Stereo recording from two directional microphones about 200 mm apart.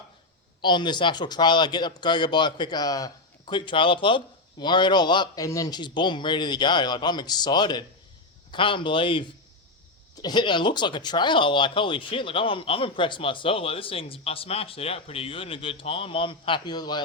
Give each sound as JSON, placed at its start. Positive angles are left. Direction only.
{"t": 0.6, "sound": "speech", "side_deg": 25}